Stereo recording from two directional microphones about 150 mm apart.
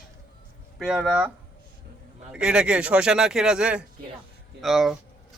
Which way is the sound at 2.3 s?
5° right (ahead or behind).